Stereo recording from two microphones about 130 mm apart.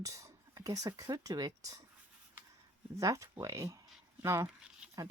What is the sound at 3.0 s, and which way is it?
Speech, 25° right (ahead or behind).